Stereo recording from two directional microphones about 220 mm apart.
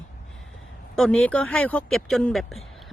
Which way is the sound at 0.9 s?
5° left (ahead or behind).